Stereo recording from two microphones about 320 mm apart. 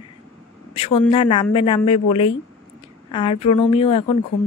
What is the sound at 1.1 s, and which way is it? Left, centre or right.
Speech, centre.